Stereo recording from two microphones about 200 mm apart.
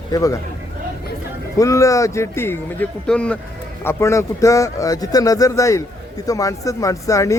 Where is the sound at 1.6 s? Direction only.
15° left (ahead or behind).